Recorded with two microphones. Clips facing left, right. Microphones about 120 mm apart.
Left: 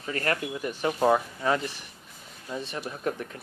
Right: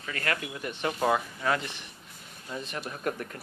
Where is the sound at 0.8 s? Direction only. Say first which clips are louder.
Left 4 dB; 15° left (ahead or behind).